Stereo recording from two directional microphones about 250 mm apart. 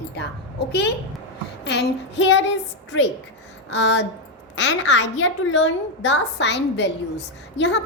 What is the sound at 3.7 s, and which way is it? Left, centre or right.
A woman's voice, left.